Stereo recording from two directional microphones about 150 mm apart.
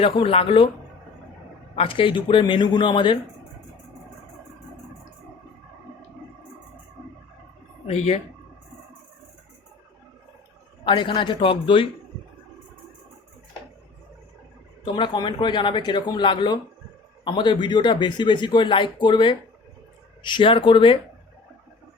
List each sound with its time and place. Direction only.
0.0 s speech: 40° left (ahead or behind)
1.7 s speech: 35° left (ahead or behind)
7.9 s speech: 45° left (ahead or behind)
10.8 s speech: 30° left (ahead or behind)
14.8 s speech: 30° left (ahead or behind)